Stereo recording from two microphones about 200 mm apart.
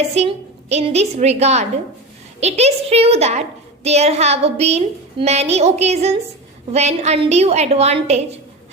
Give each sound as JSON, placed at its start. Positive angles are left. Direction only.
{"t": 0.1, "sound": "a woman's voice", "side_deg": -30}